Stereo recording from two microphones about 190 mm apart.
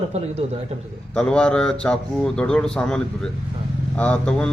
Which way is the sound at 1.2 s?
5° left (ahead or behind).